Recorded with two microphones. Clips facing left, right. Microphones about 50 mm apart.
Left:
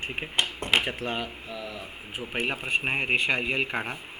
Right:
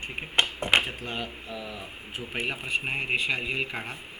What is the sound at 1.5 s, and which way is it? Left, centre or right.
Speech, centre.